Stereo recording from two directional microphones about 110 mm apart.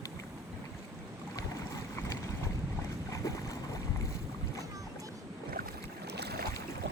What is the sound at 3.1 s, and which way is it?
Boat, 30° left (ahead or behind).